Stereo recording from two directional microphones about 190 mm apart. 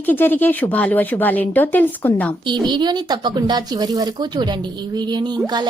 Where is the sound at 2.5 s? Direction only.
25° right (ahead or behind).